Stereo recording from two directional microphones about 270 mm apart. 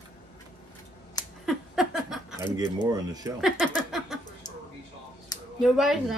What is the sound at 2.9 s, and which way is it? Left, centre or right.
Speech, centre.